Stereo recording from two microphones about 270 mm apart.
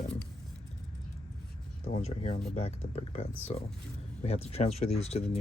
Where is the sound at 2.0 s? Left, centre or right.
Left.